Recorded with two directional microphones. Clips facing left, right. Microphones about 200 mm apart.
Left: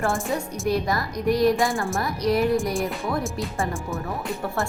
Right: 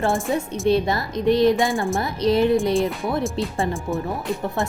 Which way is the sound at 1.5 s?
Centre (ahead or behind).